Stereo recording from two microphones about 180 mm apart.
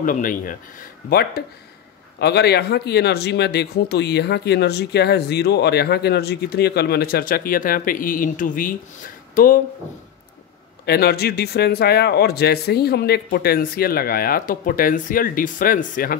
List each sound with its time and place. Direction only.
0.0 s speech: 50° left (ahead or behind)
10.9 s speech: 60° left (ahead or behind)